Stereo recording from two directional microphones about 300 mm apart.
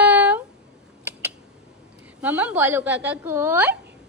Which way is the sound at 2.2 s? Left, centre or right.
Centre.